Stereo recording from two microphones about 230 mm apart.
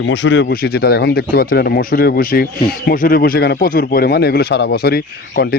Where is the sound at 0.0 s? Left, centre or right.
Left.